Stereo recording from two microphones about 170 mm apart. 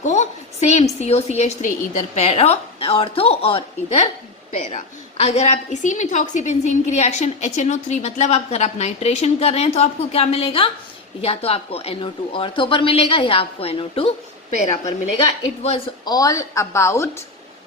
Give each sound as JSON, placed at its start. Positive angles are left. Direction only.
{"t": 0.0, "sound": "a woman's voice", "side_deg": 45}
{"t": 4.6, "sound": "a woman's voice", "side_deg": 50}
{"t": 16.0, "sound": "a woman's voice", "side_deg": 20}